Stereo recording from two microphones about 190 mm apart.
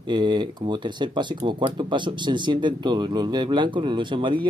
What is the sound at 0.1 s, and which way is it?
Speech, 25° right (ahead or behind).